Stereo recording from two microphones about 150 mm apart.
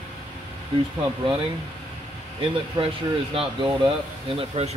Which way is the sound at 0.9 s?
40° right (ahead or behind).